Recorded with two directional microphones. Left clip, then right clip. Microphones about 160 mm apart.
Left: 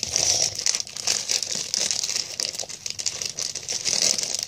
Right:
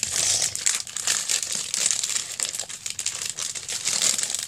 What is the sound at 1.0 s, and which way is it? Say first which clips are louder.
Crumpling: right 1 dB; centre (ahead or behind).